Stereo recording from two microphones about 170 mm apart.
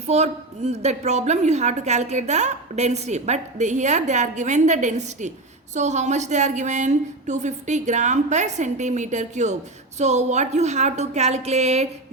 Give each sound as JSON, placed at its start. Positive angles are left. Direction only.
{"t": 0.1, "sound": "a woman's voice", "side_deg": -40}